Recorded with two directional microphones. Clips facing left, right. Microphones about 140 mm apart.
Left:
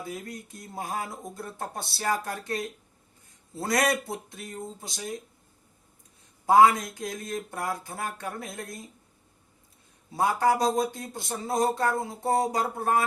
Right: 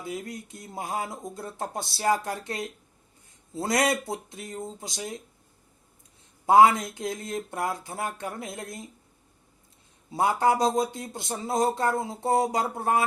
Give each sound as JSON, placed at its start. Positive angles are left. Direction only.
{"t": 0.0, "sound": "speech", "side_deg": -20}
{"t": 6.4, "sound": "speech", "side_deg": -20}
{"t": 10.1, "sound": "speech", "side_deg": -25}